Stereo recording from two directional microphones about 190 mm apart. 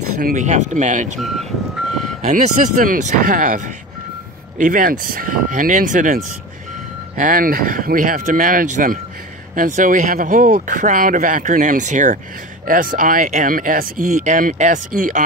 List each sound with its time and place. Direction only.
0.2 s speech: 40° right (ahead or behind)
2.2 s speech: 40° right (ahead or behind)